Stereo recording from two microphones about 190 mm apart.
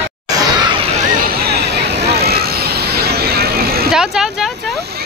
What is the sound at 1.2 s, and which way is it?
Vehicle, 60° right (ahead or behind).